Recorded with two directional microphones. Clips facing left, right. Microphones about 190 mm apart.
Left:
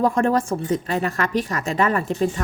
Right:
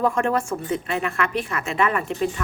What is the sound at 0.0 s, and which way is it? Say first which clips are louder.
A woman's voice: left 3 dB; 35° left (ahead or behind).